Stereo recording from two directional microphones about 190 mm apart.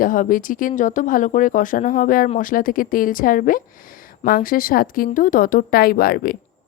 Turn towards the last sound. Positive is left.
turn(degrees=50)  # may be behind; listen again after turning